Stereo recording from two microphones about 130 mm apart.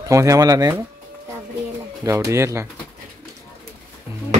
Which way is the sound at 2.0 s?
20° right (ahead or behind).